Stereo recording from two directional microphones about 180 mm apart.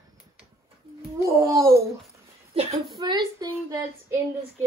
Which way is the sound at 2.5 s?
35° right (ahead or behind).